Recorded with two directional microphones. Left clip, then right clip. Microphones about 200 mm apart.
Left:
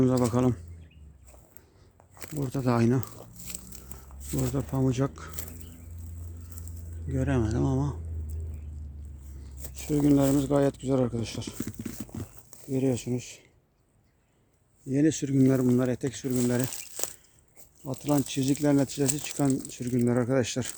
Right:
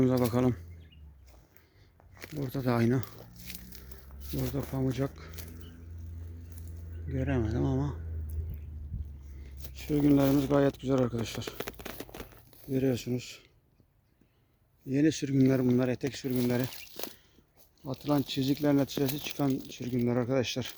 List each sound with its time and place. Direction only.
0.0 s speech: centre (ahead or behind)
2.1 s a sound: 5° left (ahead or behind)
4.5 s speech: 20° left (ahead or behind)
7.1 s speech: 15° left (ahead or behind)
9.7 s speech: centre (ahead or behind)
14.8 s speech: 5° left (ahead or behind)